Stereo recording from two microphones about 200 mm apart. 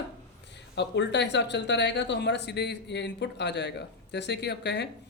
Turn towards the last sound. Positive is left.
turn(degrees=60)  # may be behind; listen again after turning